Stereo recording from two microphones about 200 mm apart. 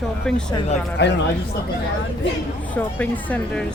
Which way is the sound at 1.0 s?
55° left (ahead or behind).